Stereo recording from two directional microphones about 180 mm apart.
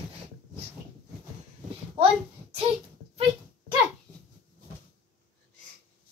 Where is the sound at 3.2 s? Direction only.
30° right (ahead or behind).